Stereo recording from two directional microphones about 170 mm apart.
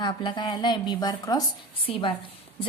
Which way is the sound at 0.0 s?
30° left (ahead or behind).